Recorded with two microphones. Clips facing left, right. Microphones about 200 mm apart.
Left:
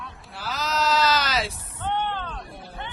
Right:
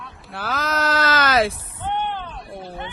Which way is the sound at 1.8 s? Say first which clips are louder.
Right 2 dB; 15° right (ahead or behind).